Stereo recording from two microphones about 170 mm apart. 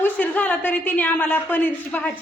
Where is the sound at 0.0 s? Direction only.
10° left (ahead or behind).